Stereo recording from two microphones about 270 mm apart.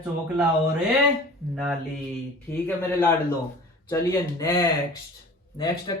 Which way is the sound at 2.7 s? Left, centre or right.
Centre.